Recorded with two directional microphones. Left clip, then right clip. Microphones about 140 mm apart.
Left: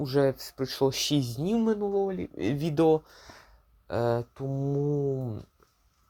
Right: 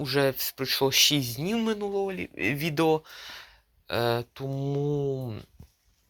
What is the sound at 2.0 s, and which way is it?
Speech, 5° left (ahead or behind).